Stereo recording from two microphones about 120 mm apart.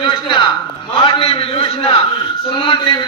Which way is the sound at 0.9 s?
45° left (ahead or behind).